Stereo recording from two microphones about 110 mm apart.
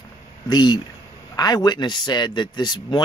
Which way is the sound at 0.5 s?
40° left (ahead or behind).